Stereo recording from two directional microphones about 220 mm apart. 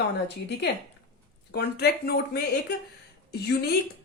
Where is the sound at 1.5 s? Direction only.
45° left (ahead or behind).